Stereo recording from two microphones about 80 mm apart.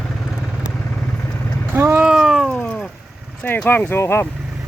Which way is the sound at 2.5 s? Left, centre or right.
Centre.